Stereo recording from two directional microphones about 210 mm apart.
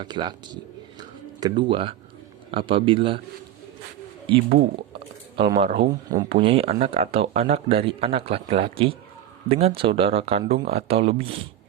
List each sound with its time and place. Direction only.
0.0 s speech: 20° right (ahead or behind)
4.4 s speech: 45° right (ahead or behind)
5.4 s speech: 25° right (ahead or behind)